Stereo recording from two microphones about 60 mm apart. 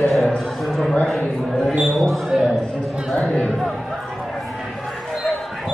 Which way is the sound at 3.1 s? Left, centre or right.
Centre.